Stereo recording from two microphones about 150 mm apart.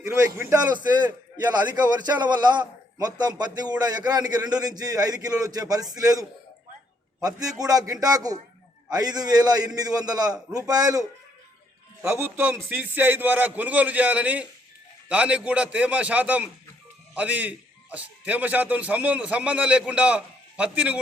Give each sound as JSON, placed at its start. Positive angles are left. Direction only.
{"t": 0.2, "sound": "a man's voice", "side_deg": -20}
{"t": 1.7, "sound": "a man's voice", "side_deg": -30}
{"t": 12.2, "sound": "a man's voice", "side_deg": -10}